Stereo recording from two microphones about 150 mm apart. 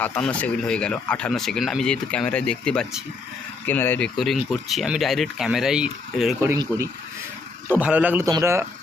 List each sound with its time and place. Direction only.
0.0 s speech: 10° left (ahead or behind)
4.2 s speech: centre (ahead or behind)
6.6 s speech: 20° right (ahead or behind)
7.7 s a man's voice: 10° right (ahead or behind)